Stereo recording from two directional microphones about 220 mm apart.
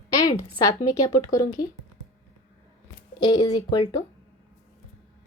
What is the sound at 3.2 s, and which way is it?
Speech, 20° left (ahead or behind).